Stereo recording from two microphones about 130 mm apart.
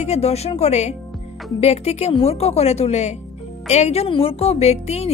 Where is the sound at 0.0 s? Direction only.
55° left (ahead or behind).